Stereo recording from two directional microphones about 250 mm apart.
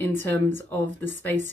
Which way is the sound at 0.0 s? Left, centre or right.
Centre.